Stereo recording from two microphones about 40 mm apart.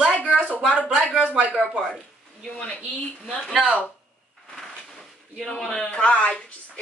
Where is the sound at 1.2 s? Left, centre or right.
Right.